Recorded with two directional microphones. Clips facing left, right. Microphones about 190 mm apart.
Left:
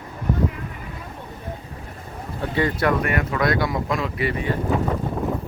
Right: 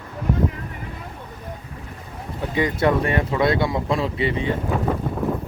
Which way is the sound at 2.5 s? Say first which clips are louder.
Right 2 dB; 15° right (ahead or behind).